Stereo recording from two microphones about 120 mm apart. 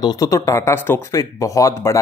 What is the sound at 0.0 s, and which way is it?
Speech, 30° left (ahead or behind).